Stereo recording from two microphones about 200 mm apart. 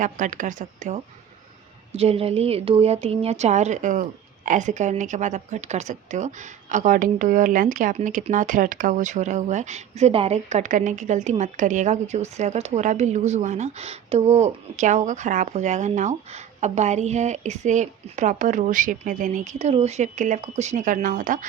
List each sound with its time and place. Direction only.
0.0 s speech: 40° right (ahead or behind)